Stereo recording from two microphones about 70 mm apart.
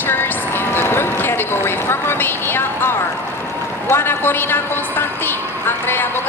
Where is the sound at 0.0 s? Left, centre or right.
Left.